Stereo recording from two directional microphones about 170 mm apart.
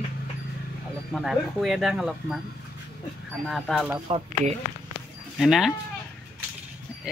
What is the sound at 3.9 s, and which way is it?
Speech, 30° right (ahead or behind).